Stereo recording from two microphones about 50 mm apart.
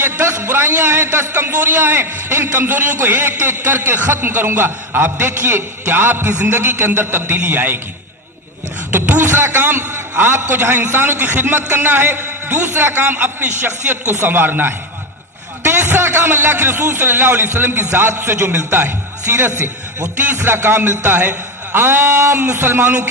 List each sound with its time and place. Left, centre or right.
0.0 s a man's voice: right
8.9 s a man's voice: right
22.0 s speech: right
22.4 s a man's voice: right